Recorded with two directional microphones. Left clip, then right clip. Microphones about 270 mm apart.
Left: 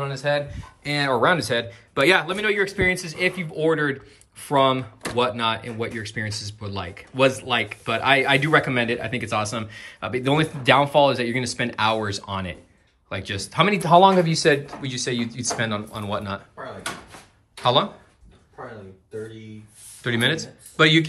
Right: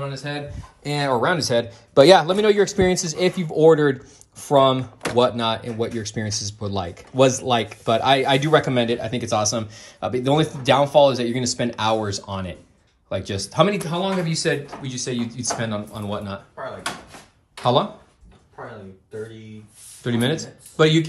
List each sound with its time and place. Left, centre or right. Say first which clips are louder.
0.0 s speech: left 6 dB; centre
4.4 s speech: right 3 dB; centre
13.7 s speech: left 10 dB; centre
20.0 s speech: left 1 dB; centre